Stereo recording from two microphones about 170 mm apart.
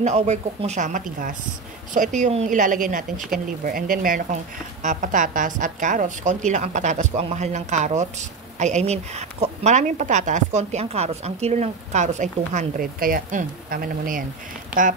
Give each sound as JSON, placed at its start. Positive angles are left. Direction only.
{"t": 0.0, "sound": "a woman's voice", "side_deg": -40}